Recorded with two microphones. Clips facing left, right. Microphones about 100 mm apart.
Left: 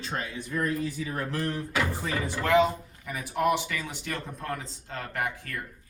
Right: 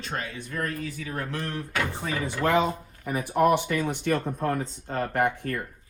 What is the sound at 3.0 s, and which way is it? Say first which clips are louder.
Speech: right 5 dB; 45° right (ahead or behind).